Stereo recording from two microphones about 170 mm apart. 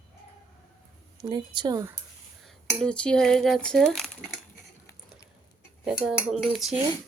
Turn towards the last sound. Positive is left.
turn(degrees=-5)  # may be behind; listen again after turning